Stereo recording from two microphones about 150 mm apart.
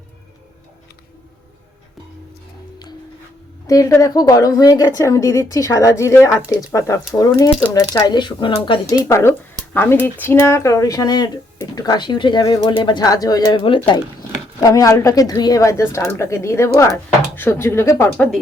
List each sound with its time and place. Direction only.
3.7 s speech: 25° left (ahead or behind)
9.0 s speech: 20° left (ahead or behind)